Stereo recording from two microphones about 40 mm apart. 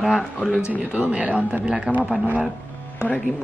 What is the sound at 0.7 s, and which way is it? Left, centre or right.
Speech, right.